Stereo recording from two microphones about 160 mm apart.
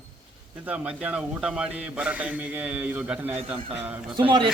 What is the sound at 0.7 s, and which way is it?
A man's voice, 5° right (ahead or behind).